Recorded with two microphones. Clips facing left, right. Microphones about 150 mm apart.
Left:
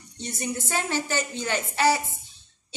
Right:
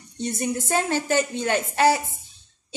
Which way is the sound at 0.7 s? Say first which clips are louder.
Right 5 dB; 50° right (ahead or behind).